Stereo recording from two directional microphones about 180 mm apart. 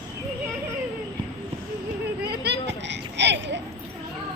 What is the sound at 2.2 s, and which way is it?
Children playing, 65° right (ahead or behind).